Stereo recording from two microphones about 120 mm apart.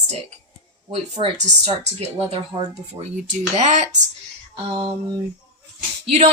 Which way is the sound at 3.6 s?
75° right (ahead or behind).